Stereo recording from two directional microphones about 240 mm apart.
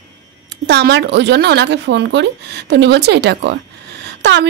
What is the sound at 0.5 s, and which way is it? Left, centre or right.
A woman's voice, right.